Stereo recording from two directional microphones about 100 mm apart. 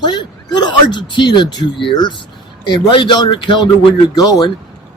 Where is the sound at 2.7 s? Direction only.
55° left (ahead or behind).